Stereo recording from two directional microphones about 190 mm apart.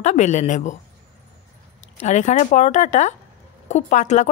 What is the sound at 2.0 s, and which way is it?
Speech, 40° left (ahead or behind).